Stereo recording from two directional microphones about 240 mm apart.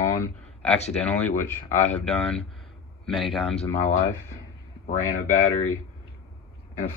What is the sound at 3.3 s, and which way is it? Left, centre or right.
Speech, left.